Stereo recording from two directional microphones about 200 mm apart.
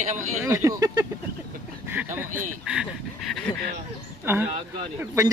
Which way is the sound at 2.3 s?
40° right (ahead or behind).